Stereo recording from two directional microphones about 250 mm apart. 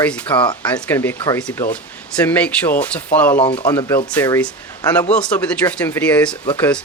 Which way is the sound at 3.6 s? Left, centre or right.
Centre.